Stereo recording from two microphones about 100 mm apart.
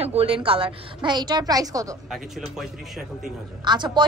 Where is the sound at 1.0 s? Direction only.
45° right (ahead or behind).